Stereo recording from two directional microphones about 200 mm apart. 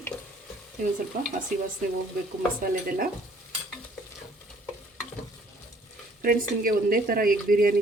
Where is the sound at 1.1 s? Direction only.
40° right (ahead or behind).